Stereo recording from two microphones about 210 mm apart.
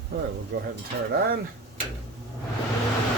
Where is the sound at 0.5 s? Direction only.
55° right (ahead or behind).